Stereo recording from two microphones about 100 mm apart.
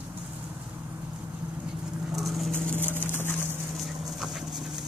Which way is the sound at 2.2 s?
Centre (ahead or behind).